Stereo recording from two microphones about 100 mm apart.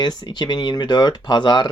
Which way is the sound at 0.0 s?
45° left (ahead or behind).